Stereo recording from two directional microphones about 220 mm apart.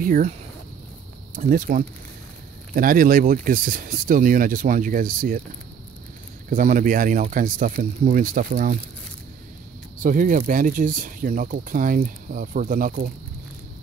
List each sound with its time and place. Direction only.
0.0 s speech: 40° right (ahead or behind)
1.3 s speech: 40° right (ahead or behind)
6.5 s speech: 40° right (ahead or behind)
10.0 s speech: 35° right (ahead or behind)